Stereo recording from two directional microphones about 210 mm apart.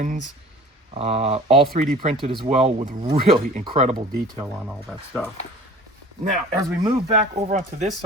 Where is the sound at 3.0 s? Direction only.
45° right (ahead or behind).